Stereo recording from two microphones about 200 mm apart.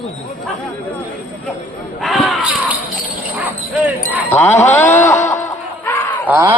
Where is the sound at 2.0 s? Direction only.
Centre (ahead or behind).